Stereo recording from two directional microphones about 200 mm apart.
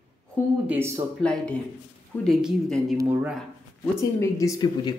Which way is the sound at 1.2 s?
5° left (ahead or behind).